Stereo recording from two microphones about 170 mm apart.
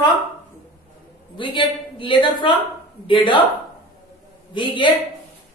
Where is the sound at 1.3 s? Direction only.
30° left (ahead or behind).